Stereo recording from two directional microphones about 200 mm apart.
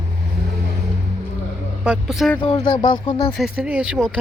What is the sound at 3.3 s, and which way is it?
Speech, 5° right (ahead or behind).